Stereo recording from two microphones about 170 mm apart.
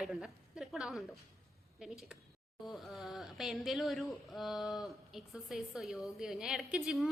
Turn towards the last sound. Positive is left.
turn(degrees=-5)  # may be behind; listen again after turning